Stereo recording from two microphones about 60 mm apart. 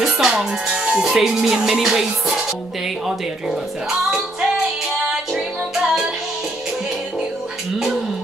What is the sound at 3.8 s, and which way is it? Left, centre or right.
Music, centre.